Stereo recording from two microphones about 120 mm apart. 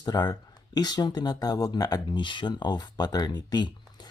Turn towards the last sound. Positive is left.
turn(degrees=35)  # may be behind; listen again after turning